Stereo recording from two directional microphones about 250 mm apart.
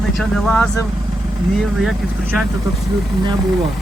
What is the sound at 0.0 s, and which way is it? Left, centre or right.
Speech, centre.